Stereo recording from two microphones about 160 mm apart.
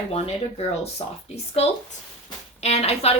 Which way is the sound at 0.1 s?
40° left (ahead or behind).